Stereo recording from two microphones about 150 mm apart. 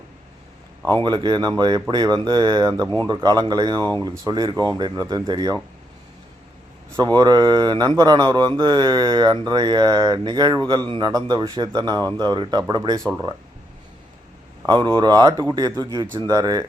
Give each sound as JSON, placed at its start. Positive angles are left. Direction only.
{"t": 0.9, "sound": "speech", "side_deg": -30}
{"t": 7.2, "sound": "speech", "side_deg": -30}
{"t": 14.7, "sound": "speech", "side_deg": -30}